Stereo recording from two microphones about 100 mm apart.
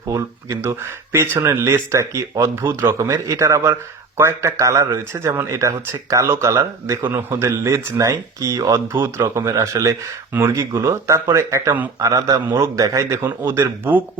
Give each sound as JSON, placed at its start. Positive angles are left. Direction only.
{"t": 0.6, "sound": "speech", "side_deg": -25}
{"t": 13.2, "sound": "speech", "side_deg": -20}